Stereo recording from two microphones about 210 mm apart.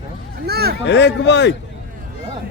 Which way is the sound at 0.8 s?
55° left (ahead or behind).